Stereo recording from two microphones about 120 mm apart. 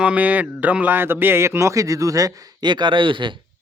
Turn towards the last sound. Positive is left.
turn(degrees=-45)  # may be behind; listen again after turning